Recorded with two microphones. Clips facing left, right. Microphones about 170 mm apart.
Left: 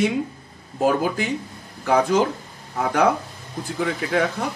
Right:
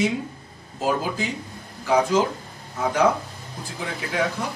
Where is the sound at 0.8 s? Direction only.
60° left (ahead or behind).